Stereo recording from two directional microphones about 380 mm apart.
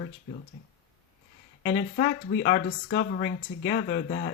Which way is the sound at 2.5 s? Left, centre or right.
Left.